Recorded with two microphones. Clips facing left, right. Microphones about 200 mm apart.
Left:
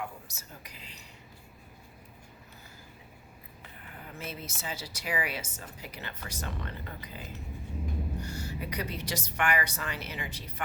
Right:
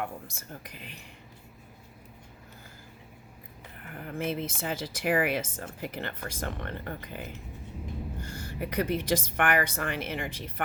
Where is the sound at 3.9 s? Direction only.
55° right (ahead or behind).